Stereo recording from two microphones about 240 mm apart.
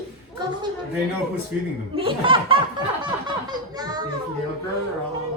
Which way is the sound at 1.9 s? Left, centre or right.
Right.